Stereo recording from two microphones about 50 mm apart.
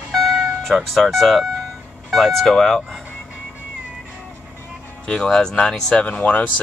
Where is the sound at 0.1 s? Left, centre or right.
Centre.